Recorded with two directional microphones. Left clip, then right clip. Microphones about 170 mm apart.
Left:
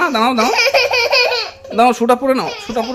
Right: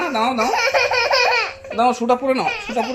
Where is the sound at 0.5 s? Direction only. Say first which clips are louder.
Left 4 dB; 55° left (ahead or behind).